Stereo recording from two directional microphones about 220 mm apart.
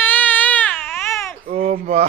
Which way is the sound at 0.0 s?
10° left (ahead or behind).